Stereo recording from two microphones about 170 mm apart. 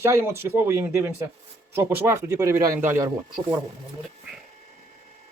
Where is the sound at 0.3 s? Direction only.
15° right (ahead or behind).